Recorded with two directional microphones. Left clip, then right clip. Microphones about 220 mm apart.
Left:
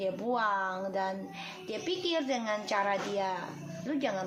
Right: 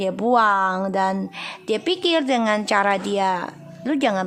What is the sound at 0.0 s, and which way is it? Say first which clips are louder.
A woman's voice: right 13 dB; 45° right (ahead or behind).